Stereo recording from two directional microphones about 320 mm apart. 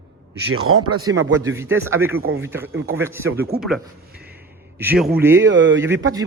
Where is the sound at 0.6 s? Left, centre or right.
Right.